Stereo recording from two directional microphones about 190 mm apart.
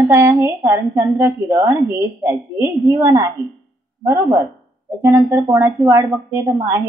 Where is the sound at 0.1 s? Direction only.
10° right (ahead or behind).